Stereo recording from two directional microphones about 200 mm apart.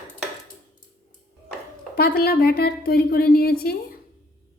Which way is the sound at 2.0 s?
50° left (ahead or behind).